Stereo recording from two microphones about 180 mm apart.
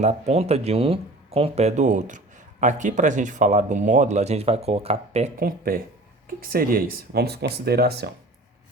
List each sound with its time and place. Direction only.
0.0 s speech: 40° right (ahead or behind)
5.4 s speech: 55° right (ahead or behind)